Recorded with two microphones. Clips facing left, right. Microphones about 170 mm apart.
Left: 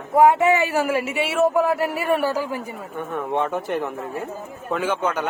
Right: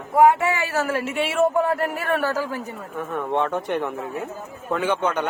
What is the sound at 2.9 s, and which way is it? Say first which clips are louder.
Speech: even; centre (ahead or behind).